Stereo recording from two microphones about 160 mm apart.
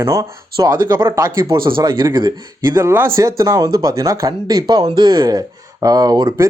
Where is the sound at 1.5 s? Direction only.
30° right (ahead or behind).